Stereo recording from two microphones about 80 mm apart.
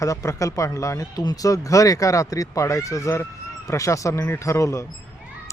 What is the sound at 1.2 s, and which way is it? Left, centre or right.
Speech, left.